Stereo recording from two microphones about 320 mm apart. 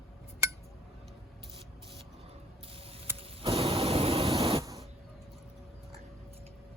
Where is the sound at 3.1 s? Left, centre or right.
Centre.